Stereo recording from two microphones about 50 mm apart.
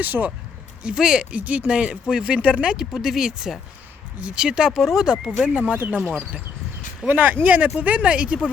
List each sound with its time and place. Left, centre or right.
0.0 s speech: right
0.8 s speech: centre
1.4 s speech: right
2.6 s speech: centre
5.1 s speech: right
7.1 s speech: right